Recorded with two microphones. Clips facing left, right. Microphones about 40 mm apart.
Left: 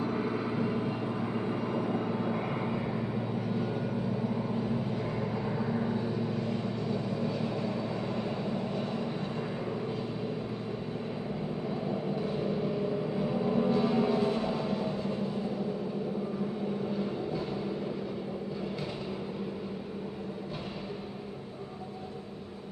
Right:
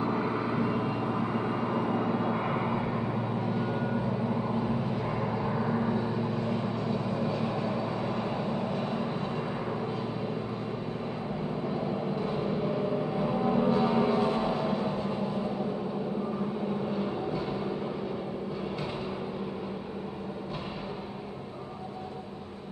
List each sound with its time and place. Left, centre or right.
0.0 s vehicle: right
5.0 s vehicle: centre
12.2 s music: right